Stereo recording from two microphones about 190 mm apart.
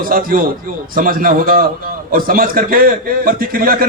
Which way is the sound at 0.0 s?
50° right (ahead or behind).